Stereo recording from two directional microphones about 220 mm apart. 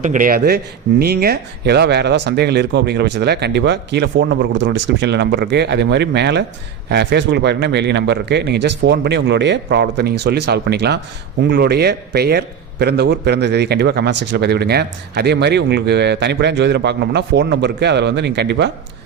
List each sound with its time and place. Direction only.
0.0 s a man's voice: 35° right (ahead or behind)